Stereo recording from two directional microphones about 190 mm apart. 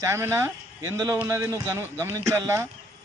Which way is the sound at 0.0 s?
15° right (ahead or behind).